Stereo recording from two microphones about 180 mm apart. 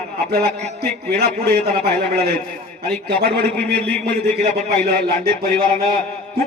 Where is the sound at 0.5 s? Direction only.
40° right (ahead or behind).